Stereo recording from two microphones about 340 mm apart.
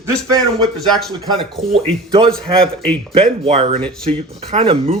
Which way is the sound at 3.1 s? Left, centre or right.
Centre.